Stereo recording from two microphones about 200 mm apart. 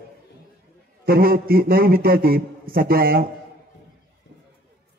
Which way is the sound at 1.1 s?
50° right (ahead or behind).